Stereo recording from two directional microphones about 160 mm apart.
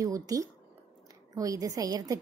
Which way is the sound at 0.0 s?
20° right (ahead or behind).